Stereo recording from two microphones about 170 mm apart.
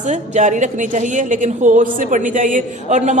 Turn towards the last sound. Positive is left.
turn(degrees=-45)  # may be behind; listen again after turning